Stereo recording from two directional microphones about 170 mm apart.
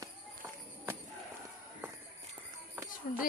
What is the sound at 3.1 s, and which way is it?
Speech, 50° left (ahead or behind).